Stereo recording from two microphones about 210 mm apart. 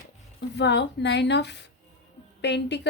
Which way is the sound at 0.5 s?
55° left (ahead or behind).